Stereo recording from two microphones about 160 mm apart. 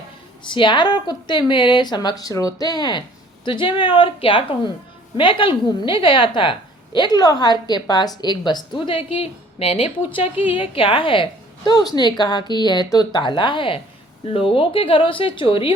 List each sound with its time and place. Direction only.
0.4 s a woman's voice: 30° left (ahead or behind)